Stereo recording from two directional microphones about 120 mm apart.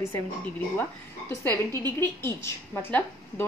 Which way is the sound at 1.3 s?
20° left (ahead or behind).